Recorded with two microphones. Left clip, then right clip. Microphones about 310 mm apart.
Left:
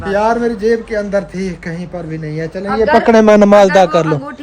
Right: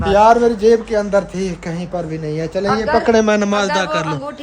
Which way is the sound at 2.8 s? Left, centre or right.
Left.